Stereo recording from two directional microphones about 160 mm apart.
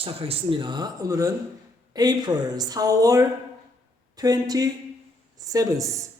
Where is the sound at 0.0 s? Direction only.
35° right (ahead or behind).